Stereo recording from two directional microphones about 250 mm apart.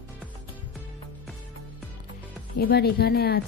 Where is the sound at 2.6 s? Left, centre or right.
Left.